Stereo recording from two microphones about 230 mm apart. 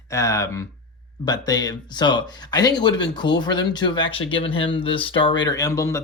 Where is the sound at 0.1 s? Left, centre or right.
Centre.